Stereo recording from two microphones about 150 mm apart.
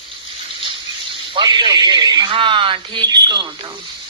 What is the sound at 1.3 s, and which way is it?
A man's voice, 30° right (ahead or behind).